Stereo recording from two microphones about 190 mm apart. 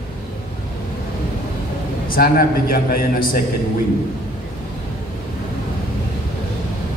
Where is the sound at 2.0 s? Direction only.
50° left (ahead or behind).